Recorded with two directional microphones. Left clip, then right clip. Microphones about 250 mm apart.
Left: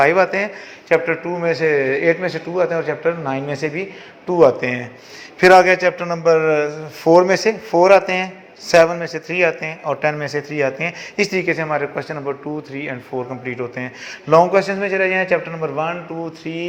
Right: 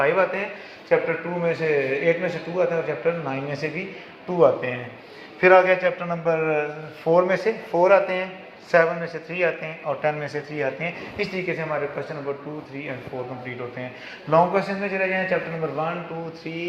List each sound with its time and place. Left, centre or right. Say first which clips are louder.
0.0 s a man's voice: left 6 dB; left
14.3 s a man's voice: left 6 dB; left